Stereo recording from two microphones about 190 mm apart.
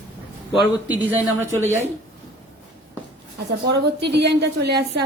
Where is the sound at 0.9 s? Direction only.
10° right (ahead or behind).